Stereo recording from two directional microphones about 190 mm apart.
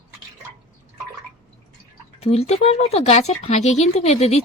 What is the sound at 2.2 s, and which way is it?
Speech, 35° left (ahead or behind).